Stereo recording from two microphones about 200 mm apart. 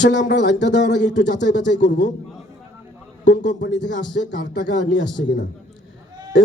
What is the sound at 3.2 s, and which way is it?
A man's voice, 65° left (ahead or behind).